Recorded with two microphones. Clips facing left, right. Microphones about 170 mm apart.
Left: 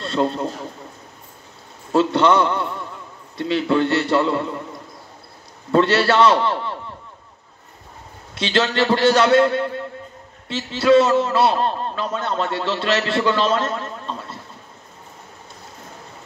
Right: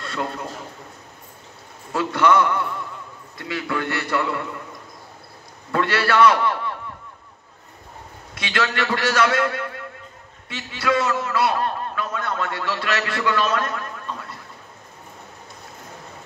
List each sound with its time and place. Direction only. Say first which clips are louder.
0.0 s a man's voice: left 7 dB; 25° left (ahead or behind)
1.9 s a man's voice: left 3 dB; 25° left (ahead or behind)
5.7 s a man's voice: left 5 dB; 25° left (ahead or behind)
8.4 s a man's voice: left 5 dB; 25° left (ahead or behind)